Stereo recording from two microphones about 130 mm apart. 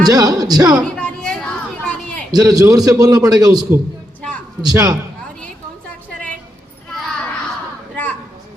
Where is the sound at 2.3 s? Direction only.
30° right (ahead or behind).